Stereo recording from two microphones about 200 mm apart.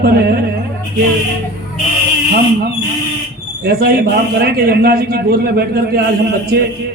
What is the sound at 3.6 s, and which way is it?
A man's voice, 50° right (ahead or behind).